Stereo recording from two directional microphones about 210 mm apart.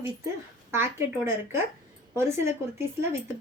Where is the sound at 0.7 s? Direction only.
10° right (ahead or behind).